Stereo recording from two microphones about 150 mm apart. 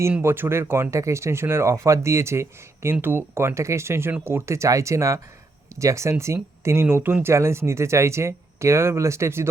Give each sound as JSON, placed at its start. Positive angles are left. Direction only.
{"t": 0.2, "sound": "speech", "side_deg": -15}